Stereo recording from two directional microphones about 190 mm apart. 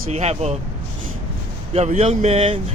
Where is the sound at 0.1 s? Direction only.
35° right (ahead or behind).